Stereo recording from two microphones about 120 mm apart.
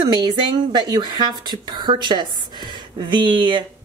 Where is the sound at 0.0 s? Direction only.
40° right (ahead or behind).